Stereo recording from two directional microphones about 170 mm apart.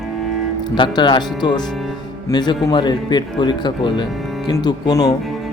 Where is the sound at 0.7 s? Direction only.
25° left (ahead or behind).